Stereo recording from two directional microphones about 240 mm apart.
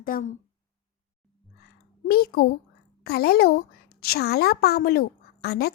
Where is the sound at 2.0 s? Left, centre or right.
Left.